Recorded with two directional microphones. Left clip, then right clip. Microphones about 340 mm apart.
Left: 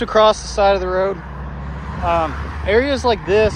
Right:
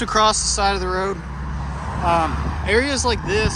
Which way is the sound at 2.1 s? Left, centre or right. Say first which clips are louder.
Left 1 dB; centre.